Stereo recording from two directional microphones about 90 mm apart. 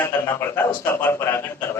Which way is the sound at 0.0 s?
25° left (ahead or behind).